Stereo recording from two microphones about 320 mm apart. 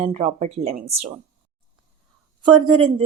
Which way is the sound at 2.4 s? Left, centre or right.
Centre.